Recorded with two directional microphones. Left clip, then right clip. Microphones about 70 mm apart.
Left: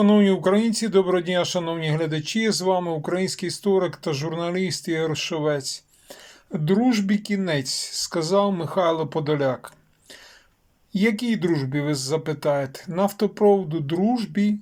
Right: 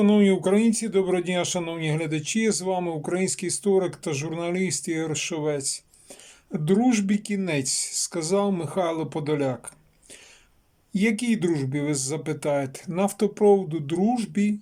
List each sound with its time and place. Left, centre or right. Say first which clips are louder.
0.0 s speech: left 2 dB; right
6.8 s speech: left 1 dB; right
10.9 s speech: left 2 dB; right